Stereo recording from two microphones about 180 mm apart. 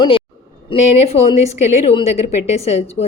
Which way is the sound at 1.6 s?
40° left (ahead or behind).